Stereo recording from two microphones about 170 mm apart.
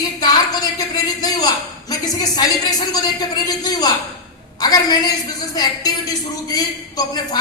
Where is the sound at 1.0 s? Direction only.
20° left (ahead or behind).